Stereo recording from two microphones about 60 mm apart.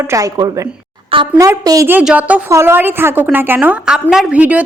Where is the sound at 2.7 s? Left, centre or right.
Right.